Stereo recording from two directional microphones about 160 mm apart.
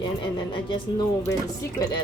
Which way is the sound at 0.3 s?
30° left (ahead or behind).